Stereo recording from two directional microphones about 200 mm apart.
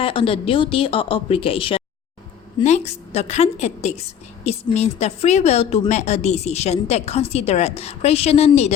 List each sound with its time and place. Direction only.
0.0 s a woman's voice: 25° left (ahead or behind)